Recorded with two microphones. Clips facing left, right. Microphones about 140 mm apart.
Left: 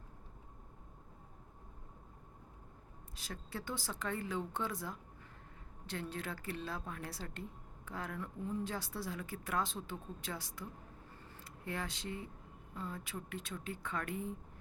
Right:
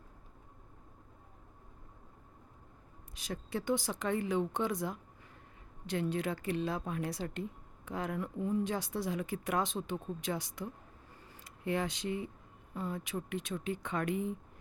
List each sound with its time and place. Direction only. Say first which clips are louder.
3.2 s speech: right 7 dB; 15° right (ahead or behind)